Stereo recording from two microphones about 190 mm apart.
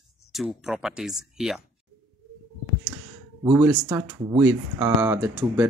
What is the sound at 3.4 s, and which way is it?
Speech, 15° right (ahead or behind).